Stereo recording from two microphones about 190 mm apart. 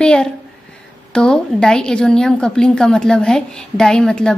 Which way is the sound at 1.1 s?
5° left (ahead or behind).